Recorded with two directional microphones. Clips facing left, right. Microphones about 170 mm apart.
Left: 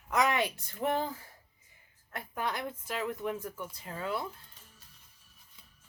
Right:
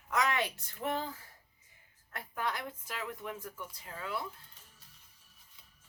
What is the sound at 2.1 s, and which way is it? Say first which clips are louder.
A woman's voice: left 2 dB; 20° left (ahead or behind).